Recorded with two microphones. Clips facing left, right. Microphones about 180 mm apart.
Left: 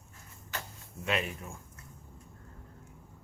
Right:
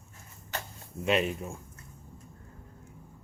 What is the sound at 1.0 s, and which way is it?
Speech, 25° right (ahead or behind).